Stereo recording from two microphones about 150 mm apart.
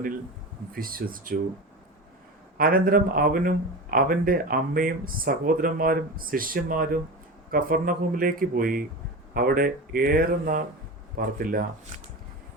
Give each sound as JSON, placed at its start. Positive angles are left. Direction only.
{"t": 0.7, "sound": "speech", "side_deg": -75}
{"t": 2.6, "sound": "speech", "side_deg": -75}